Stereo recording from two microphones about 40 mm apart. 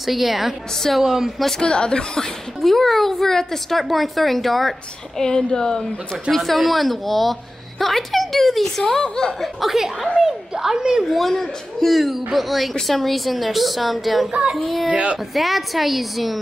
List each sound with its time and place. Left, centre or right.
0.0 s a woman's voice: centre
1.6 s speech: left
2.6 s a woman's voice: centre
5.2 s a woman's voice: centre
6.3 s a woman's voice: centre
9.0 s speech: centre
9.4 s a woman's voice: centre
11.1 s a woman's voice: centre
14.9 s a woman's voice: right
15.3 s a woman's voice: centre